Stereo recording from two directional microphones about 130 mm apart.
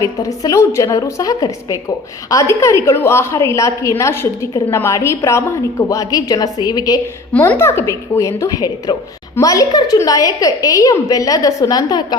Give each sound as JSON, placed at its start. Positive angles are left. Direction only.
{"t": 0.0, "sound": "a woman's voice", "side_deg": 25}
{"t": 7.3, "sound": "a woman's voice", "side_deg": 15}